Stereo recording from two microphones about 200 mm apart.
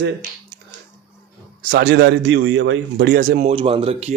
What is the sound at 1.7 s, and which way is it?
Speech, 45° right (ahead or behind).